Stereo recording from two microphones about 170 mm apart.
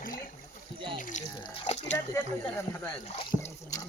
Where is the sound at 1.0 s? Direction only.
50° left (ahead or behind).